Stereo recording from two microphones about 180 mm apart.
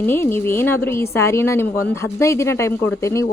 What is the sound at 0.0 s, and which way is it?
A woman's voice, 10° left (ahead or behind).